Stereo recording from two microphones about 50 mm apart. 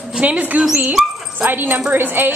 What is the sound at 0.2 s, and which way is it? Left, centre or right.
Speech, right.